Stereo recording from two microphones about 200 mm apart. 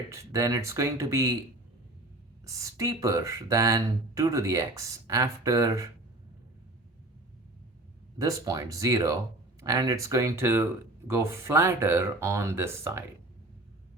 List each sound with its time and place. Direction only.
0.1 s speech: 15° right (ahead or behind)
2.5 s speech: 15° right (ahead or behind)
8.2 s speech: 15° right (ahead or behind)